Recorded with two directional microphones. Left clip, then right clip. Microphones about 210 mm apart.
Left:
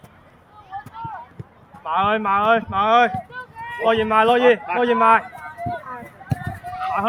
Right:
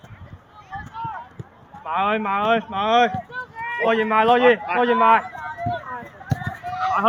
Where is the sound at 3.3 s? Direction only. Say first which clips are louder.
Right 3 dB; 30° right (ahead or behind).